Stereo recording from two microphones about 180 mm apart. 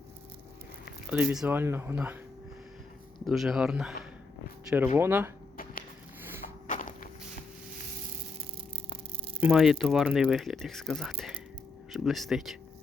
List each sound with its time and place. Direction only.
1.1 s speech: 5° right (ahead or behind)
3.2 s speech: centre (ahead or behind)
4.9 s speech: 15° right (ahead or behind)
6.7 s walk: 45° left (ahead or behind)
9.4 s speech: centre (ahead or behind)